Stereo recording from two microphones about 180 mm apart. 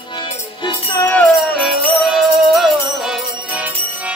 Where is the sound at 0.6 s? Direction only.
10° left (ahead or behind).